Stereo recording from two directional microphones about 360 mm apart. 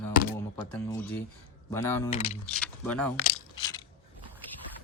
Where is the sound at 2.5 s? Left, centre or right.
Centre.